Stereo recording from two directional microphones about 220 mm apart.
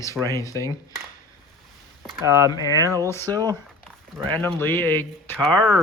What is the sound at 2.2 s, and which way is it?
Speech, 15° right (ahead or behind).